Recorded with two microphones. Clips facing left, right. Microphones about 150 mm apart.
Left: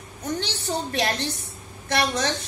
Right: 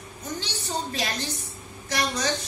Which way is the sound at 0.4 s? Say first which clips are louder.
Left 3 dB; 65° left (ahead or behind).